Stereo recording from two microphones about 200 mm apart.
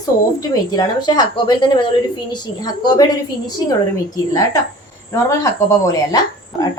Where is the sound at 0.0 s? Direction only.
20° left (ahead or behind).